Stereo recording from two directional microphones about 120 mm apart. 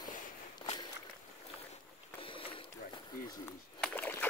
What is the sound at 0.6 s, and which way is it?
Walk, 35° left (ahead or behind).